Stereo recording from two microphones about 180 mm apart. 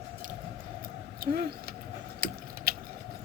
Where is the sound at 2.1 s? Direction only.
55° right (ahead or behind).